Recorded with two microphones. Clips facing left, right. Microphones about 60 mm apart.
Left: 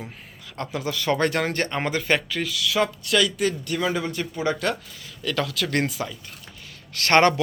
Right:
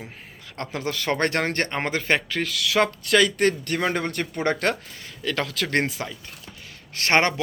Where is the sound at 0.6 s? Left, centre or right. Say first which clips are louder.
Left 1 dB; right.